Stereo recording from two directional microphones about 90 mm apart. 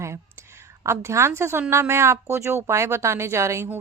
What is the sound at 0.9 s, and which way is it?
A woman's voice, 30° right (ahead or behind).